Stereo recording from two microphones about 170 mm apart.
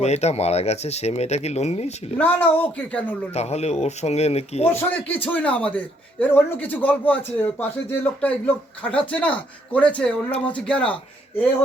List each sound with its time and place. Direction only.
0.0 s speech: 40° left (ahead or behind)
2.1 s a man's voice: 10° left (ahead or behind)
3.3 s speech: 40° left (ahead or behind)
4.7 s a man's voice: 10° left (ahead or behind)